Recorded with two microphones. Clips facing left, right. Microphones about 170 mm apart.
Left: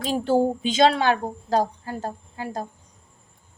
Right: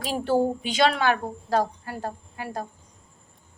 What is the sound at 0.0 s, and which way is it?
A woman's voice, 25° left (ahead or behind).